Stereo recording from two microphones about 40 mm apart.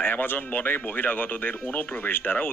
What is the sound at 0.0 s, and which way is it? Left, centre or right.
Speech, left.